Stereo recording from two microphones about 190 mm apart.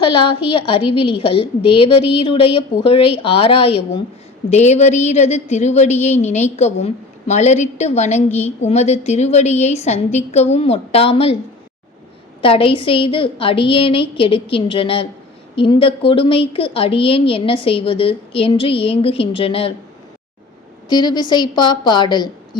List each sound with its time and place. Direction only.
0.0 s a woman's voice: 25° left (ahead or behind)
12.4 s a woman's voice: 30° left (ahead or behind)
20.9 s a woman's voice: 20° left (ahead or behind)